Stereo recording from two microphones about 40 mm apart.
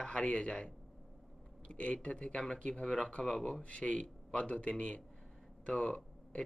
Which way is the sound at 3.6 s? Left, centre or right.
Left.